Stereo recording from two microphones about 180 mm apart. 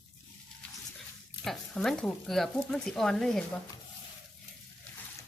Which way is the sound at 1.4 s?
Centre (ahead or behind).